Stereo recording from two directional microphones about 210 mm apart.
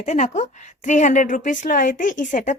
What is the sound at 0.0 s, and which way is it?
A woman's voice, 35° left (ahead or behind).